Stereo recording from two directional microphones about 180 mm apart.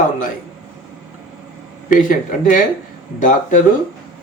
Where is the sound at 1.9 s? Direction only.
45° left (ahead or behind).